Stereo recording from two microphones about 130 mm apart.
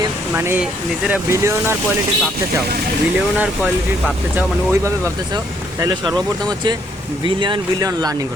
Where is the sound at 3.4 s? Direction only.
10° right (ahead or behind).